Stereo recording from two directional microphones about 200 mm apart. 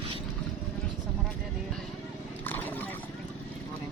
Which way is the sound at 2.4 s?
10° left (ahead or behind).